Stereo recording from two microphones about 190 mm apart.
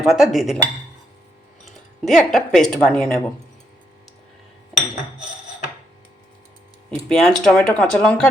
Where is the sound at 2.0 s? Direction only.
Centre (ahead or behind).